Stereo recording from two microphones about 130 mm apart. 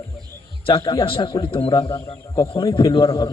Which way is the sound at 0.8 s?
45° left (ahead or behind).